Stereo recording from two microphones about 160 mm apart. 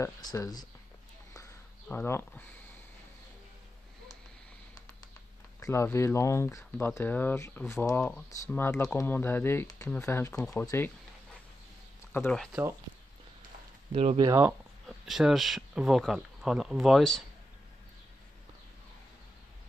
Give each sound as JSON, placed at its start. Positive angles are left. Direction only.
{"t": 0.0, "sound": "speech", "side_deg": 20}
{"t": 1.3, "sound": "a sound", "side_deg": 15}
{"t": 5.6, "sound": "speech", "side_deg": 15}
{"t": 12.1, "sound": "speech", "side_deg": 10}
{"t": 13.9, "sound": "speech", "side_deg": -35}
{"t": 14.2, "sound": "speech", "side_deg": -15}
{"t": 14.9, "sound": "speech", "side_deg": 0}